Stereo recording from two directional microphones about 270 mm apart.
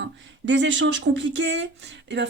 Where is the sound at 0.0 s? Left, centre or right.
Right.